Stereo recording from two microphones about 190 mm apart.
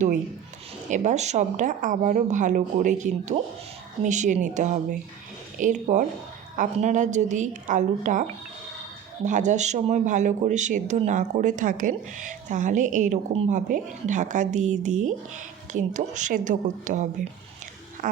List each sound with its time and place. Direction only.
0.9 s speech: 40° right (ahead or behind)
9.2 s speech: 40° right (ahead or behind)
18.0 s a sound: 45° right (ahead or behind)